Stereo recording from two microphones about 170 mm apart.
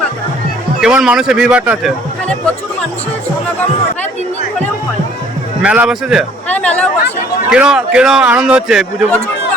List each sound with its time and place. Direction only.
0.8 s speech: 5° right (ahead or behind)
5.6 s speech: 5° right (ahead or behind)
6.5 s speech: 10° left (ahead or behind)
7.5 s speech: 5° right (ahead or behind)